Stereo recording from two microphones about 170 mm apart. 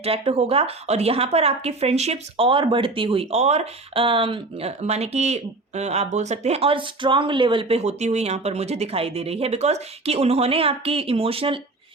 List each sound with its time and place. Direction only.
0.0 s speech: 35° right (ahead or behind)